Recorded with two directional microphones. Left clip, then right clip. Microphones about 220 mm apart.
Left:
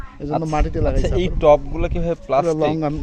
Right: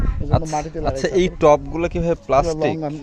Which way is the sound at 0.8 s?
20° right (ahead or behind).